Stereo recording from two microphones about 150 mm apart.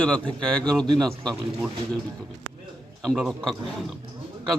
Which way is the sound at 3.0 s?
Centre (ahead or behind).